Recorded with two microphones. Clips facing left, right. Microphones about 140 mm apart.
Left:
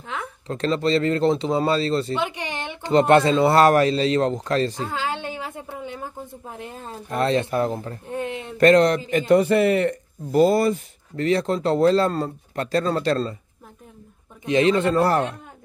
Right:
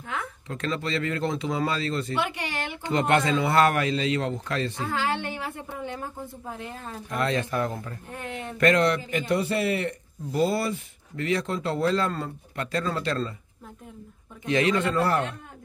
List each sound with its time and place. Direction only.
0.1 s a man's voice: 30° left (ahead or behind)
2.1 s speech: 20° left (ahead or behind)
2.9 s a man's voice: 35° left (ahead or behind)
4.9 s a sound: 20° left (ahead or behind)
6.5 s speech: 20° left (ahead or behind)
8.5 s a man's voice: 35° left (ahead or behind)
14.4 s speech: 25° left (ahead or behind)